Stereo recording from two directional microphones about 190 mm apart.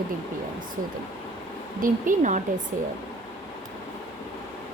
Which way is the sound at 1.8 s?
45° right (ahead or behind).